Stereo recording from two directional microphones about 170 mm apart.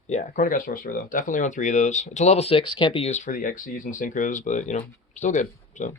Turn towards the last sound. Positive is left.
turn(degrees=45)  # may be behind; listen again after turning